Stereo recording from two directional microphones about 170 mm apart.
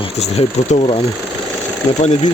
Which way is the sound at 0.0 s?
40° left (ahead or behind).